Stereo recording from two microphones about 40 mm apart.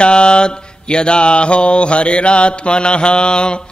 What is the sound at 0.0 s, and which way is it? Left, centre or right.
Mantra, left.